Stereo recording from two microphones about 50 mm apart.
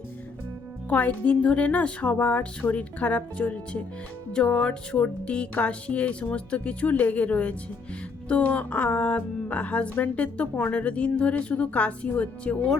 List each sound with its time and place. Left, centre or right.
0.9 s speech: left
2.4 s speech: left